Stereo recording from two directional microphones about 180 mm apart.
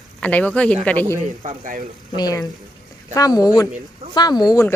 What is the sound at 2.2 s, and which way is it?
Speech, 20° left (ahead or behind).